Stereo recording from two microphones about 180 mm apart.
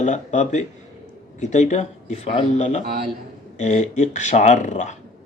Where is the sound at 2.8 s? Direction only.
60° right (ahead or behind).